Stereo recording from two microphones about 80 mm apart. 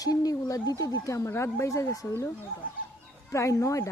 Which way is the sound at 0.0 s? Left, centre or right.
Left.